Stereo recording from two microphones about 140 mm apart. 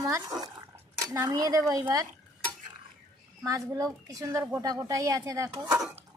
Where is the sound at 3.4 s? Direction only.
25° right (ahead or behind).